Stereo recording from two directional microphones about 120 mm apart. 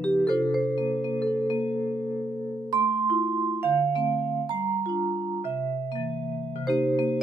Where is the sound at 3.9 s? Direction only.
50° left (ahead or behind).